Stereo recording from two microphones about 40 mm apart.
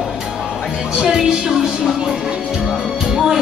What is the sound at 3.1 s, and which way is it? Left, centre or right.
Music, centre.